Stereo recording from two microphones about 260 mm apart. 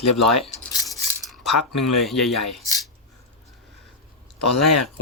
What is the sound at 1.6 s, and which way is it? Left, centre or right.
Speech, left.